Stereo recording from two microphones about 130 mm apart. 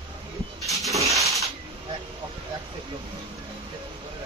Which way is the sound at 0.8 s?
25° right (ahead or behind).